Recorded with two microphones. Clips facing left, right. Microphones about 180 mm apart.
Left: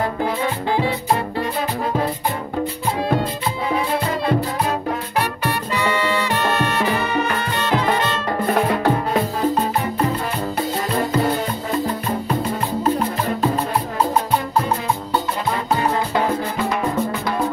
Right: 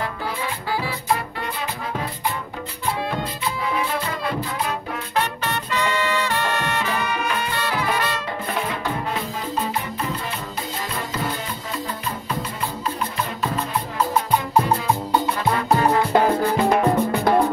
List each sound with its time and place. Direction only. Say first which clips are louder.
5.8 s music: left 2 dB; 15° left (ahead or behind)
8.5 s music: left 9 dB; 45° left (ahead or behind)